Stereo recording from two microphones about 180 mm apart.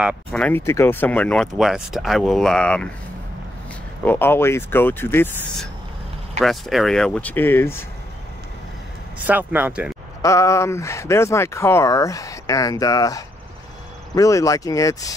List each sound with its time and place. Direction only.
0.3 s speech: 10° left (ahead or behind)
4.0 s speech: 10° left (ahead or behind)
6.4 s speech: centre (ahead or behind)
9.2 s speech: 10° right (ahead or behind)
10.2 s speech: 15° left (ahead or behind)